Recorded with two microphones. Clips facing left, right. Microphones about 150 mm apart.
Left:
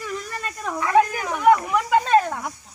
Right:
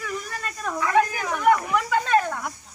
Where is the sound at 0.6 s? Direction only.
25° left (ahead or behind).